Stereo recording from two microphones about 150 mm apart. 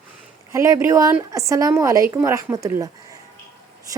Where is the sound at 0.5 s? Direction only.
20° right (ahead or behind).